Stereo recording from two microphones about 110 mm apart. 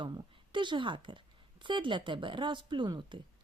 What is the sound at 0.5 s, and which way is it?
Speech, 45° right (ahead or behind).